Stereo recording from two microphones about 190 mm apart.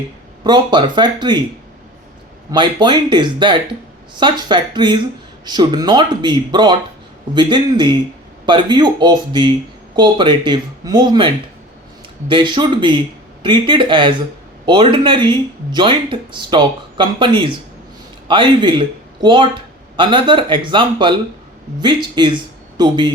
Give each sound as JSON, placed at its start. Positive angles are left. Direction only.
{"t": 0.4, "sound": "speech", "side_deg": -25}
{"t": 2.5, "sound": "speech", "side_deg": -20}
{"t": 12.3, "sound": "speech", "side_deg": -25}